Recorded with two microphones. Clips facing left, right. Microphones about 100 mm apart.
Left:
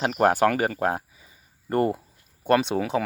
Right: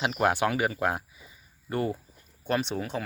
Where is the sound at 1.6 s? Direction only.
55° left (ahead or behind).